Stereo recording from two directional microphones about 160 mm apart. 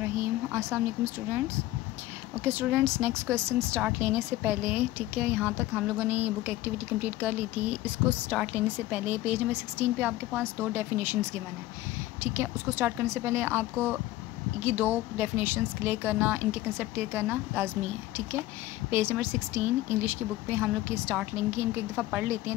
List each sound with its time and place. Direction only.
0.0 s speech: 15° right (ahead or behind)
2.4 s a woman's voice: 15° right (ahead or behind)
18.9 s a woman's voice: 15° right (ahead or behind)